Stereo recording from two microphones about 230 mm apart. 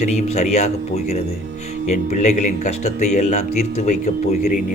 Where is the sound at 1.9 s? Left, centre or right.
Left.